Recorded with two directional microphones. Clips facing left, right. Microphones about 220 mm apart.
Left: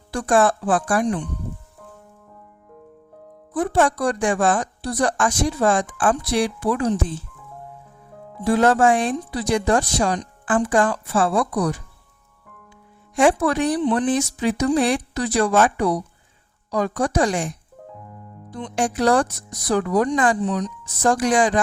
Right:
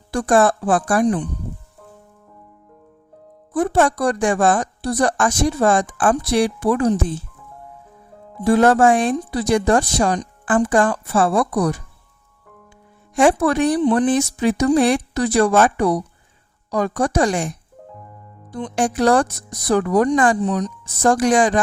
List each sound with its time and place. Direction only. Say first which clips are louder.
0.1 s speech: right 2 dB; 45° right (ahead or behind)
3.5 s speech: right 2 dB; 45° right (ahead or behind)
8.4 s speech: right 3 dB; 50° right (ahead or behind)
13.1 s speech: right 2 dB; 50° right (ahead or behind)
18.5 s speech: right 3 dB; 50° right (ahead or behind)